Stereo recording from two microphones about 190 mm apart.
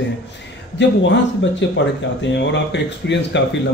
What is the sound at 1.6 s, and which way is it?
A man's voice, 70° left (ahead or behind).